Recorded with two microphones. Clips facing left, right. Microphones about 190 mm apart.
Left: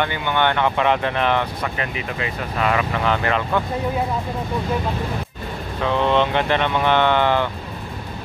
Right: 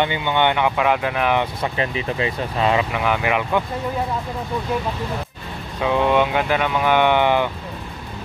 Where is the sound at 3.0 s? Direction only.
15° right (ahead or behind).